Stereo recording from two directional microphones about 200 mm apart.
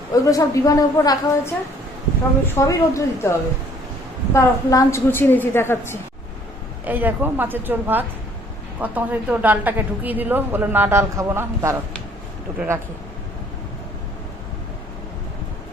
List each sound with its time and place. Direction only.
0.1 s a woman's voice: 15° left (ahead or behind)
2.6 s a woman's voice: 15° left (ahead or behind)
4.4 s a woman's voice: 15° left (ahead or behind)
6.8 s a woman's voice: 10° right (ahead or behind)